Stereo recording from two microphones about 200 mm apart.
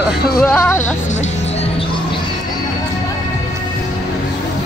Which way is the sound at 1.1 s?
35° left (ahead or behind).